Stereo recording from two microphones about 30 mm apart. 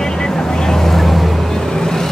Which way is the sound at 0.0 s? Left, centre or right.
Left.